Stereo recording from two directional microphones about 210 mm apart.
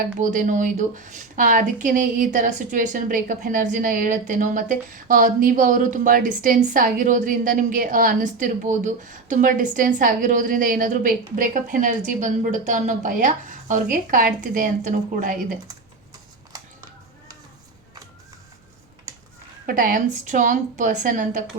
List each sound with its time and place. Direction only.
0.0 s a woman's voice: 40° right (ahead or behind)
19.6 s a woman's voice: 40° right (ahead or behind)